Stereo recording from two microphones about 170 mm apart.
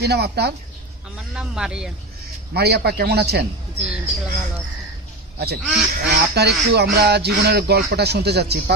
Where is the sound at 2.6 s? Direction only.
70° right (ahead or behind).